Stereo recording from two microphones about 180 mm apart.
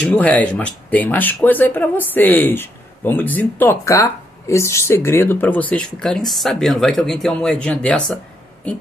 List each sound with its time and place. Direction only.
0.0 s speech: 5° left (ahead or behind)